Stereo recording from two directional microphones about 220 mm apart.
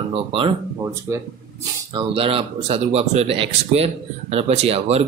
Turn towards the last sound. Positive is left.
turn(degrees=-30)  # may be behind; listen again after turning